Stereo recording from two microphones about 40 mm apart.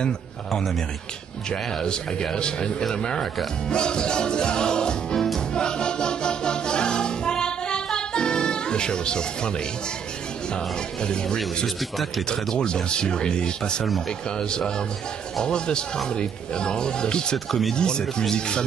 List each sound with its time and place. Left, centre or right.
0.5 s speech: centre
3.7 s music: left
10.5 s speech: left
11.6 s speech: centre
12.3 s speech: left
13.8 s speech: centre
14.4 s speech: centre
17.5 s speech: centre
17.7 s speech: left